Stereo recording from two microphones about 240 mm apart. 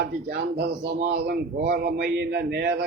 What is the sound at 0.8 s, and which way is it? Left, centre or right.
Speech, right.